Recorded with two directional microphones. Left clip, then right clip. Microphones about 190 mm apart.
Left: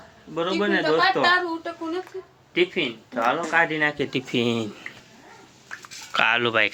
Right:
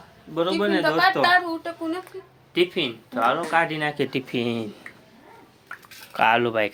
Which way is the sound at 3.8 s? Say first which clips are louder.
Left 2 dB; 25° right (ahead or behind).